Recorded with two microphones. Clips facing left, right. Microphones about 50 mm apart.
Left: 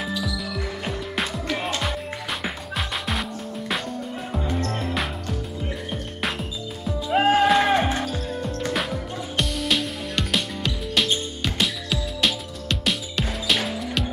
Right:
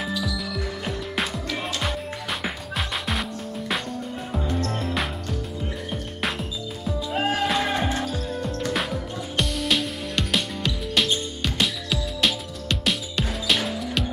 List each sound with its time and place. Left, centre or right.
0.2 s music: centre
3.1 s music: centre
7.1 s music: left
8.0 s music: centre